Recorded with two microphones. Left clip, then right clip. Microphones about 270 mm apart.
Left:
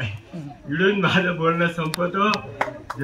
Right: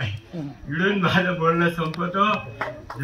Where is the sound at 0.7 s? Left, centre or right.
Centre.